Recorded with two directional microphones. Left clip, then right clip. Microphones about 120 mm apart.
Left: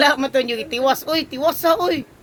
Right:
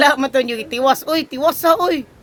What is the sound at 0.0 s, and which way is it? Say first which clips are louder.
Speech: right 2 dB; 35° right (ahead or behind).